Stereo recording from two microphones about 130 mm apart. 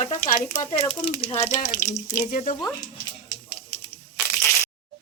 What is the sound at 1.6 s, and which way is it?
Speech, 20° left (ahead or behind).